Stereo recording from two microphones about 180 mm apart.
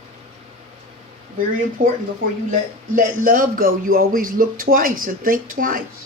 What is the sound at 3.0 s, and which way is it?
Speech, 50° right (ahead or behind).